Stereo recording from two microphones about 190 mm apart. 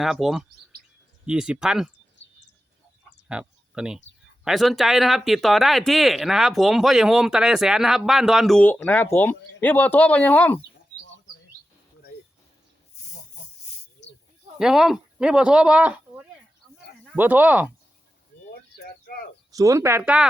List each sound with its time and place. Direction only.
0.0 s speech: centre (ahead or behind)
3.2 s a sound: 5° right (ahead or behind)
4.4 s speech: centre (ahead or behind)
14.0 s snake: 65° left (ahead or behind)
14.6 s speech: centre (ahead or behind)
19.0 s a sound: 55° left (ahead or behind)
19.5 s speech: 15° right (ahead or behind)